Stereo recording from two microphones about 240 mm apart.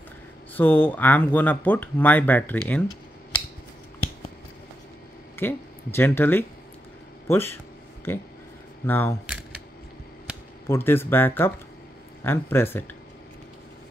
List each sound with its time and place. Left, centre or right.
0.6 s speech: centre
5.3 s speech: centre
10.7 s speech: centre